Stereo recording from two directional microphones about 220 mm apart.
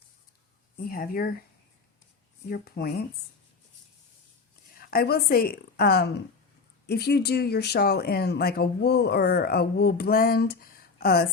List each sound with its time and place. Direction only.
0.9 s speech: 40° left (ahead or behind)
2.5 s speech: 45° left (ahead or behind)
4.7 s a woman's voice: 40° left (ahead or behind)